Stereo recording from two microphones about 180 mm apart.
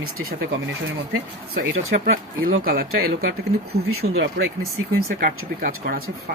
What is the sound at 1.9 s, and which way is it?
Speech, 60° right (ahead or behind).